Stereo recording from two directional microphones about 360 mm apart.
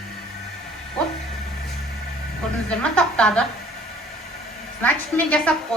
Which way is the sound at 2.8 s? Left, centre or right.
Centre.